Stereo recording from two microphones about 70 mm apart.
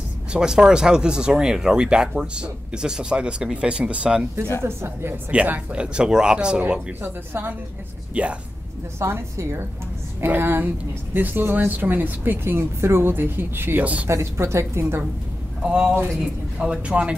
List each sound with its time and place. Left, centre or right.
0.3 s speech: centre
4.6 s a woman's voice: right
5.3 s speech: centre
7.0 s speech: right
8.1 s speech: centre
9.0 s a woman's voice: right
15.6 s speech: centre